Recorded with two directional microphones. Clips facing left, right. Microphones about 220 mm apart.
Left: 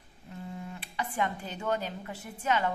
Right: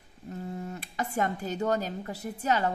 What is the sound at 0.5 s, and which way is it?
A woman's voice, 40° right (ahead or behind).